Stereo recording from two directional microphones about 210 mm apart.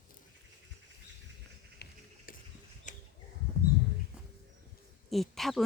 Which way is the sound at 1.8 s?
40° left (ahead or behind).